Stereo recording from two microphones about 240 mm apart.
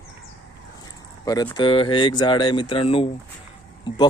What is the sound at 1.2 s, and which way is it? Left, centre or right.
A man's voice, centre.